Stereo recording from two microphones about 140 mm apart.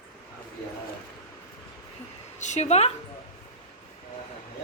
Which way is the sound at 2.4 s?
55° left (ahead or behind).